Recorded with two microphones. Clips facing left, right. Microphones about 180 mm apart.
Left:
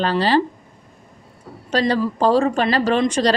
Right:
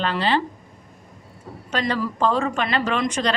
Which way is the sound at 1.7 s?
35° left (ahead or behind).